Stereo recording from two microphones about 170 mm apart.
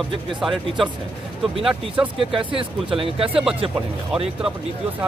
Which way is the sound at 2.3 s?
30° right (ahead or behind).